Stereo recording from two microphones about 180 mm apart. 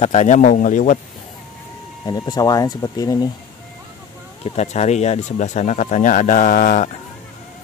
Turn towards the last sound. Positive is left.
turn(degrees=45)  # may be behind; listen again after turning